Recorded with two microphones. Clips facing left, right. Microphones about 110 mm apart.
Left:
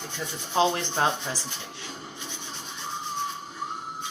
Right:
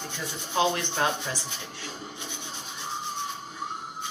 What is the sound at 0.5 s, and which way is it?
Speech, 30° left (ahead or behind).